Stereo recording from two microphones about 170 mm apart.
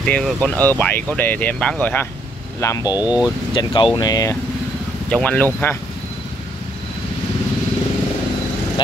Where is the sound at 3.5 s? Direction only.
30° left (ahead or behind).